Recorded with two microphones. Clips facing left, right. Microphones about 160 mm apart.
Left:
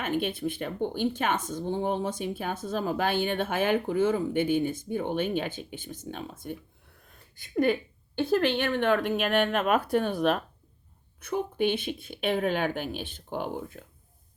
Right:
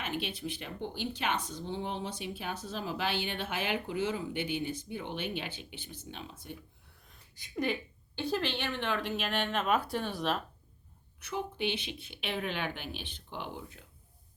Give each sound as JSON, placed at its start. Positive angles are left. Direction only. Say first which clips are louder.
{"t": 0.0, "sound": "speech", "louder": "left 8 dB", "side_deg": 50}